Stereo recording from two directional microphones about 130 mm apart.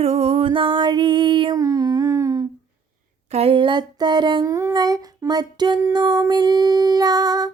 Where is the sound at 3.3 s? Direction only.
50° right (ahead or behind).